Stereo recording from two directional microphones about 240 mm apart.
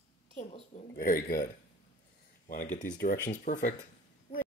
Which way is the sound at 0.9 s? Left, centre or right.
Left.